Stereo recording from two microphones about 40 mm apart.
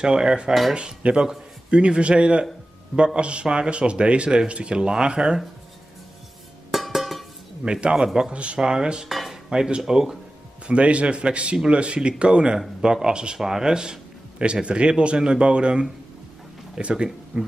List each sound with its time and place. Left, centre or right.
0.0 s speech: centre
6.7 s cowbell: centre
7.6 s speech: right
9.1 s cutlery: centre
9.5 s speech: centre
10.7 s speech: right